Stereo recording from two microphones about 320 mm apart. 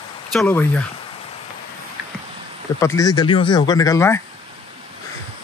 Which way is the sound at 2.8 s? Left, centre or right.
Centre.